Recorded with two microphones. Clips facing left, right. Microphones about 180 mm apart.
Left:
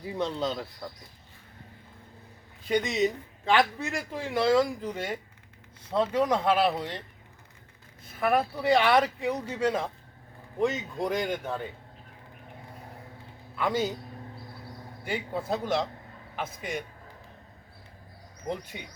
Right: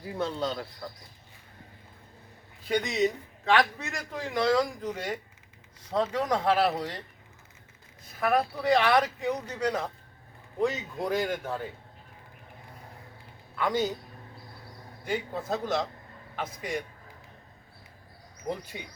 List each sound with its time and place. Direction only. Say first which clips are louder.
0.0 s speech: left 1 dB; centre (ahead or behind)
2.6 s speech: left 1 dB; centre (ahead or behind)
8.2 s speech: left 1 dB; 5° left (ahead or behind)
9.6 s speech: left 2 dB; 30° left (ahead or behind)
10.6 s speech: left 1 dB; centre (ahead or behind)
13.6 s speech: even; 5° left (ahead or behind)
15.0 s speech: even; 5° left (ahead or behind)